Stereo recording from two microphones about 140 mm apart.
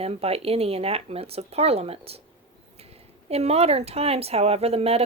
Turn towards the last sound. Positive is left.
turn(degrees=-45)  # may be behind; listen again after turning